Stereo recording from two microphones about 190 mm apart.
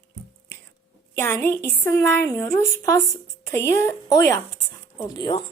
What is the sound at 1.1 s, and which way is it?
A woman's voice, 10° left (ahead or behind).